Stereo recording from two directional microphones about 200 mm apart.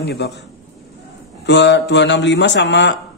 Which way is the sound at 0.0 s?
55° left (ahead or behind).